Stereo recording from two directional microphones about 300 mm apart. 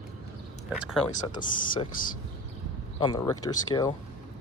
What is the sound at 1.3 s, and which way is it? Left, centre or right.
Speech, centre.